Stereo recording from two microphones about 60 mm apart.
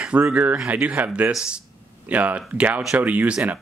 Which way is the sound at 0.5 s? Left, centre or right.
Right.